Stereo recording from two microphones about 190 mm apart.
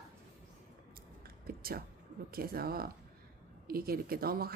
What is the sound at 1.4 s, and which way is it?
Speech, 50° right (ahead or behind).